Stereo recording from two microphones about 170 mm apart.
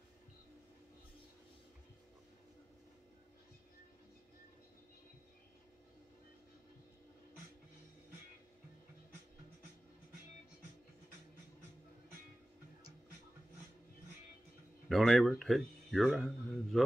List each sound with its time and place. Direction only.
14.9 s a man's voice: centre (ahead or behind)